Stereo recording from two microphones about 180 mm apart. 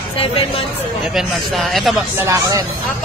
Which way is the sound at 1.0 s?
Centre (ahead or behind).